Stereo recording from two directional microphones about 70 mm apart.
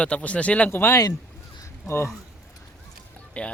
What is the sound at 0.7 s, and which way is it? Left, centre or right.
Speech, left.